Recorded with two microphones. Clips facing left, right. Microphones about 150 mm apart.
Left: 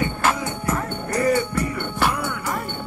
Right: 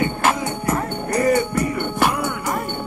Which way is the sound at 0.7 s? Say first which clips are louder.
Right 3 dB; 40° right (ahead or behind).